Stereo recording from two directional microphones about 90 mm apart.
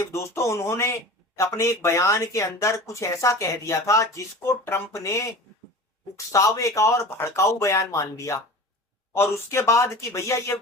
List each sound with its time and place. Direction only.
0.0 s speech: 30° left (ahead or behind)